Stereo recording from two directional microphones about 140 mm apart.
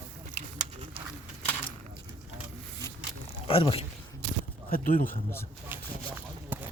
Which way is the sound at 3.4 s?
40° left (ahead or behind).